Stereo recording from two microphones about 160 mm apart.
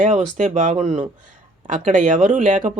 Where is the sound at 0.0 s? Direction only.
50° right (ahead or behind).